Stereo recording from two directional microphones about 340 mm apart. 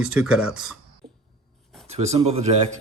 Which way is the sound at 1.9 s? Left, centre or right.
Centre.